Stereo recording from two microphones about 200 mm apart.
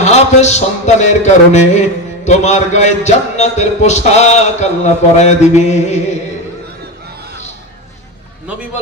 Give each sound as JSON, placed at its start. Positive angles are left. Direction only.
{"t": 0.0, "sound": "a man's voice", "side_deg": 35}